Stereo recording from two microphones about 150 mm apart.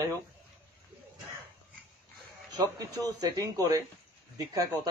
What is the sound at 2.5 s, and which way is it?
A man's voice, 25° right (ahead or behind).